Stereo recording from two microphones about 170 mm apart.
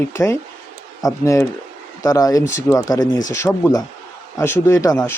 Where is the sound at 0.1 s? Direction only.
15° left (ahead or behind).